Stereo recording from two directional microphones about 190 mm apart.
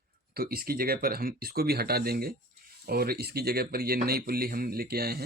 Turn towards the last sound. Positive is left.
turn(degrees=-55)  # may be behind; listen again after turning